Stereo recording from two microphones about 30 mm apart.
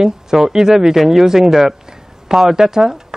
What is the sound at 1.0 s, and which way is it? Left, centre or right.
Speech, centre.